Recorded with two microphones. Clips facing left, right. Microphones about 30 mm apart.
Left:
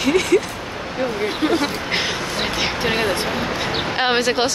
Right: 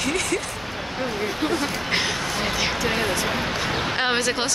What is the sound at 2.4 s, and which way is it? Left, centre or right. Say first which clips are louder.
Speech: left 2 dB; left.